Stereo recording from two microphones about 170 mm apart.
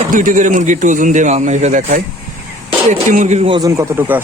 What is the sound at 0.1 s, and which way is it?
A man's voice, 50° right (ahead or behind).